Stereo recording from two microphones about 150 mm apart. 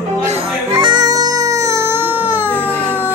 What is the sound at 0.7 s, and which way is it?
Music, 30° right (ahead or behind).